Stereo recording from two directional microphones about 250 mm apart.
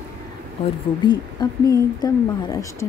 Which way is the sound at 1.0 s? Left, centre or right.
Centre.